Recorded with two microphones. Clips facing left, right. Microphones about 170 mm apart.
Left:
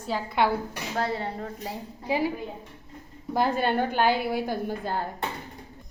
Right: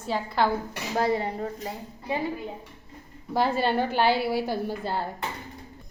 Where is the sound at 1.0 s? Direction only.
15° right (ahead or behind).